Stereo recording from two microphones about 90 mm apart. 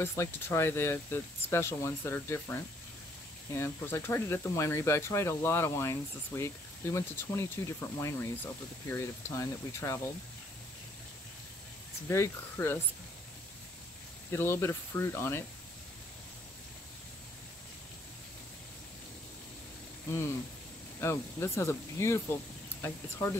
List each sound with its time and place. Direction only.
0.0 s speech: 30° left (ahead or behind)
12.1 s speech: 30° left (ahead or behind)
14.3 s speech: 25° left (ahead or behind)
21.0 s speech: 30° left (ahead or behind)